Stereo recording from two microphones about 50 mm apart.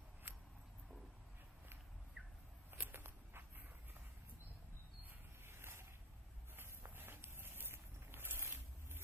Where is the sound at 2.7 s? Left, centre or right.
Right.